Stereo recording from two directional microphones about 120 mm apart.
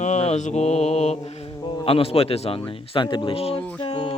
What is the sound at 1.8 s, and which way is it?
Speech, 50° left (ahead or behind).